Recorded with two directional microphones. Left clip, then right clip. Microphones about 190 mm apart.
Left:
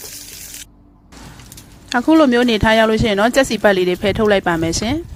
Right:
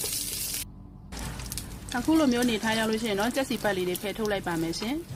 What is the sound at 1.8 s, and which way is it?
Speech, 40° left (ahead or behind).